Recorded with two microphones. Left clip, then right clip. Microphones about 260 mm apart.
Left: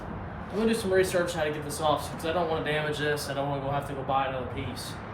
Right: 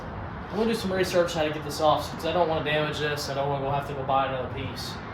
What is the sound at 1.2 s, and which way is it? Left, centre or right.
Speech, right.